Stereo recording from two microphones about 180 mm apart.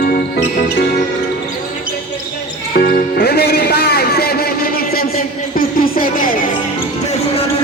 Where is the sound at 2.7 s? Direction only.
55° left (ahead or behind).